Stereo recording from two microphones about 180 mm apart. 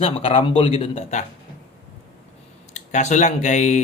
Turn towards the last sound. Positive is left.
turn(degrees=40)  # may be behind; listen again after turning